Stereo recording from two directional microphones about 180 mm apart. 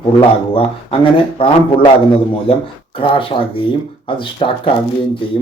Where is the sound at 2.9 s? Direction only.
30° left (ahead or behind).